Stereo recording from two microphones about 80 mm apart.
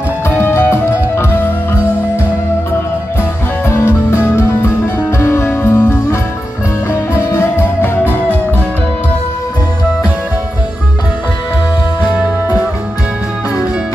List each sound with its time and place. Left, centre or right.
0.4 s music: left
3.6 s music: left
6.9 s music: left